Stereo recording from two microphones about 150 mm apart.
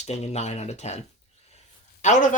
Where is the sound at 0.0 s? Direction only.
45° left (ahead or behind).